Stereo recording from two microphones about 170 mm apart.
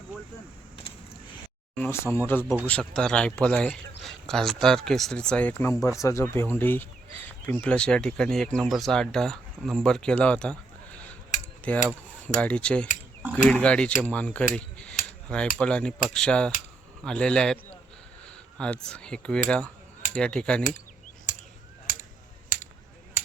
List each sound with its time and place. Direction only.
1.7 s speech: 15° left (ahead or behind)
11.7 s a man's voice: 10° left (ahead or behind)
22.5 s a sound: 50° left (ahead or behind)